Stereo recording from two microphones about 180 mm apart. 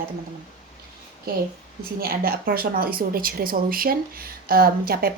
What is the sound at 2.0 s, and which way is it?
A woman's voice, 55° right (ahead or behind).